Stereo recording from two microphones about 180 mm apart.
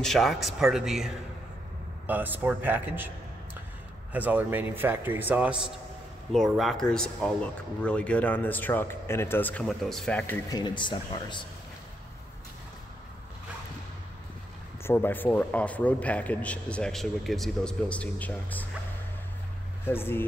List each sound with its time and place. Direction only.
0.0 s a man's voice: centre (ahead or behind)
4.1 s a man's voice: 10° right (ahead or behind)
10.5 s speech: 25° left (ahead or behind)
14.8 s a man's voice: 10° left (ahead or behind)
19.9 s a man's voice: 10° left (ahead or behind)